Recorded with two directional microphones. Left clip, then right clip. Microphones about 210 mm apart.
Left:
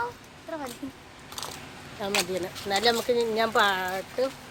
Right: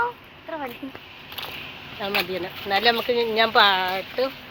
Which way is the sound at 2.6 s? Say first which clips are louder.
Right 4 dB; 10° left (ahead or behind).